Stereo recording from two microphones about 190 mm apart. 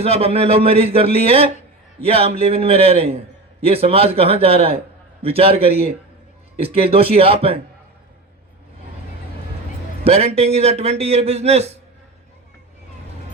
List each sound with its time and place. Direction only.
0.0 s a man's voice: 30° right (ahead or behind)
10.0 s a man's voice: 30° right (ahead or behind)